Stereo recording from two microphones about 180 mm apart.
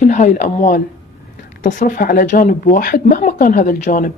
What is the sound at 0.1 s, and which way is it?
Speech, 45° left (ahead or behind).